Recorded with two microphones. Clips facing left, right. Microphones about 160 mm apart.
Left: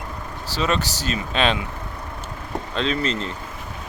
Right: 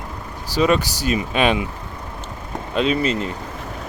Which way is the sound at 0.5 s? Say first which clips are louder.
Right 6 dB; 10° right (ahead or behind).